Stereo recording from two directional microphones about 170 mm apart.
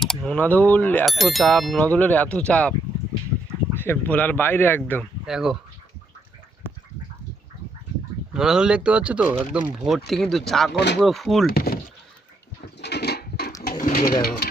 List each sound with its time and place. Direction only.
0.0 s speech: centre (ahead or behind)
1.0 s speech: centre (ahead or behind)
3.8 s speech: 10° left (ahead or behind)
5.2 s speech: 5° right (ahead or behind)
8.3 s speech: 5° right (ahead or behind)
11.5 s speech: 60° left (ahead or behind)
12.8 s a sound: 75° left (ahead or behind)
13.7 s bird: 50° left (ahead or behind)